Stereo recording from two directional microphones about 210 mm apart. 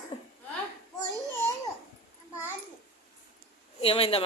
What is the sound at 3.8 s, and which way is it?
Speech, 25° left (ahead or behind).